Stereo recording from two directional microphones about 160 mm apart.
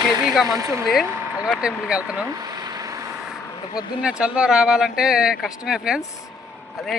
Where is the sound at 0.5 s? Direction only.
20° right (ahead or behind).